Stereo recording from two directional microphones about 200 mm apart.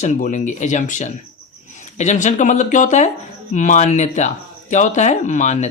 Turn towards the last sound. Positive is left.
turn(degrees=35)  # may be behind; listen again after turning